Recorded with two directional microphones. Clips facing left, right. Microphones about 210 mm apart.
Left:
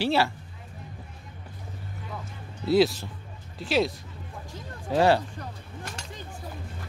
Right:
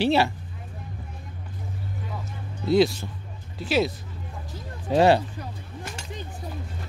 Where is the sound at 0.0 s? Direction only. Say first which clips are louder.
Right 3 dB; 20° right (ahead or behind).